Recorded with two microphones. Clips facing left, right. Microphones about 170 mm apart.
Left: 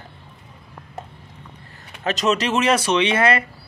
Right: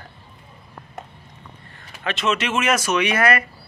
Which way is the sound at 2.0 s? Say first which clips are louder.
Left 3 dB; 40° left (ahead or behind).